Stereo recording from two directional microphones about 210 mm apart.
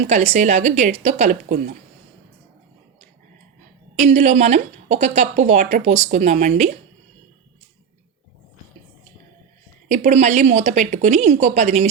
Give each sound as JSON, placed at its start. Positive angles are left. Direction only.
{"t": 0.1, "sound": "a woman's voice", "side_deg": -30}
{"t": 3.9, "sound": "a woman's voice", "side_deg": -30}
{"t": 9.9, "sound": "a woman's voice", "side_deg": -35}